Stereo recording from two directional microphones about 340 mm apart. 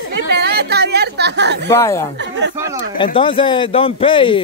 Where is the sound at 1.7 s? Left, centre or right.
Centre.